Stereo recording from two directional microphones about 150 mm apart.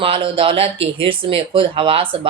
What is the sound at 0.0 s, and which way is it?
Speech, 35° right (ahead or behind).